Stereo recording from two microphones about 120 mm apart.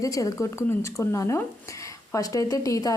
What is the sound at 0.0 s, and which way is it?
A woman's voice, 30° left (ahead or behind).